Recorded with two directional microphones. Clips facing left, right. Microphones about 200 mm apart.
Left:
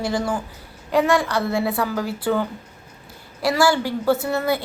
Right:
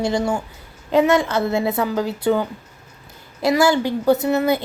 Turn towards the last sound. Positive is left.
turn(degrees=-20)  # may be behind; listen again after turning